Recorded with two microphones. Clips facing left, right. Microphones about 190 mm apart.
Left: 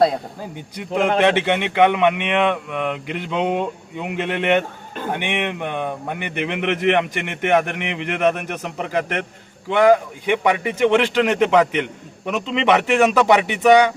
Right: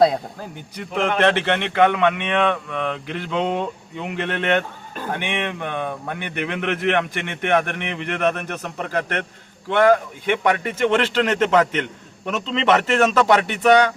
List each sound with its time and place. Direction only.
0.8 s speech: 15° left (ahead or behind)